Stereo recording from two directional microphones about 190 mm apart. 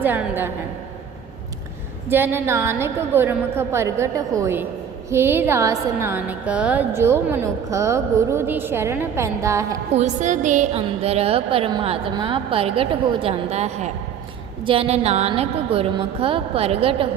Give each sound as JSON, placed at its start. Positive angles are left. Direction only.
{"t": 0.0, "sound": "a woman's voice", "side_deg": -10}
{"t": 2.0, "sound": "a woman's voice", "side_deg": -10}
{"t": 9.9, "sound": "a woman's voice", "side_deg": -35}